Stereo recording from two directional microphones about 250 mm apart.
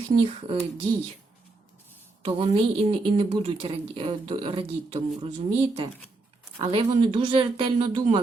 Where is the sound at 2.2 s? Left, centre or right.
Right.